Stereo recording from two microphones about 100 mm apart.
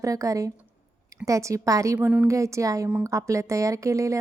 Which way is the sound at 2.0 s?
20° right (ahead or behind).